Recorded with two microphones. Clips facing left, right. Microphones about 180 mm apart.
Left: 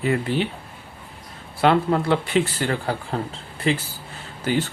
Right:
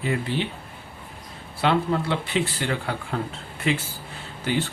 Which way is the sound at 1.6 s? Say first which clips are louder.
Left 4 dB; 50° left (ahead or behind).